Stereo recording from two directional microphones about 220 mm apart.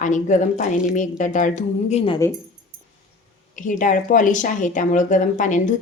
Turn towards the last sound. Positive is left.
turn(degrees=35)  # may be behind; listen again after turning